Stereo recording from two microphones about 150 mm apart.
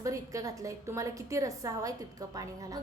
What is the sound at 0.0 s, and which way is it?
A woman's voice, 20° right (ahead or behind).